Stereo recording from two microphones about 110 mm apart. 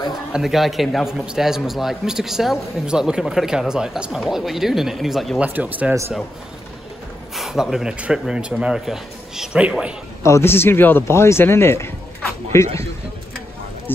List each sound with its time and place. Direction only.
0.3 s a man's voice: centre (ahead or behind)
5.4 s speech: 15° right (ahead or behind)
7.3 s a man's voice: centre (ahead or behind)
10.2 s speech: 25° left (ahead or behind)
13.9 s speech: 20° left (ahead or behind)